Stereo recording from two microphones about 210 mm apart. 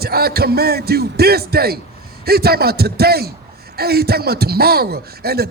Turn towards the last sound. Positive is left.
turn(degrees=-50)  # may be behind; listen again after turning